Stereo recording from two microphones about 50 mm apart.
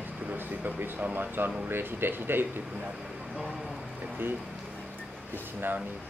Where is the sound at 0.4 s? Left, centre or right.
Right.